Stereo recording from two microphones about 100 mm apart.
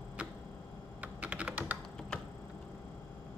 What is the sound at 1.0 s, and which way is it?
Typing, 15° right (ahead or behind).